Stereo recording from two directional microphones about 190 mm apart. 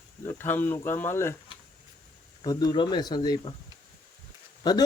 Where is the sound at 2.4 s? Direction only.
20° left (ahead or behind).